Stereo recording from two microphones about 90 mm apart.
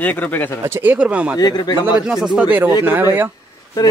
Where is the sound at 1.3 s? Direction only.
50° left (ahead or behind).